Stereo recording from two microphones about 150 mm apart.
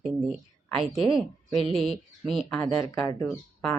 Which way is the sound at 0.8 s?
35° right (ahead or behind).